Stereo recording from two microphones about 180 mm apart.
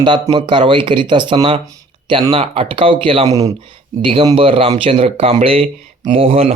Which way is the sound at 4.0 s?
30° right (ahead or behind).